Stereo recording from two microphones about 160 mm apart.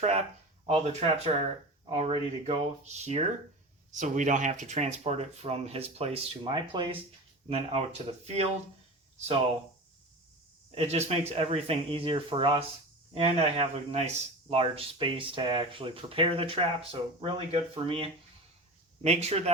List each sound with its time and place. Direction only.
0.6 s speech: 40° right (ahead or behind)
10.8 s speech: 45° right (ahead or behind)